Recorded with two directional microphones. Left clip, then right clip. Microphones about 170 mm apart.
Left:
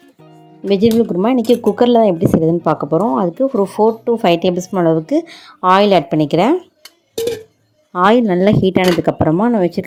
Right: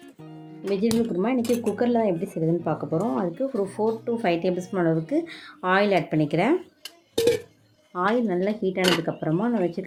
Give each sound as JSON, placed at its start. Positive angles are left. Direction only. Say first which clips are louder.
{"t": 0.7, "sound": "a woman's voice", "louder": "left 11 dB", "side_deg": 45}
{"t": 7.9, "sound": "speech", "louder": "left 12 dB", "side_deg": 45}